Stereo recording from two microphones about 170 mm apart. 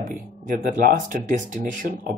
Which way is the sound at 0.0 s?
50° right (ahead or behind).